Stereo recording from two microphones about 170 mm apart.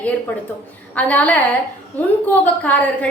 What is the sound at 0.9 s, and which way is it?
A woman's voice, 10° left (ahead or behind).